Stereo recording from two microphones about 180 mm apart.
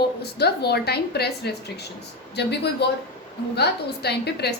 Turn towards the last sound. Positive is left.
turn(degrees=65)  # may be behind; listen again after turning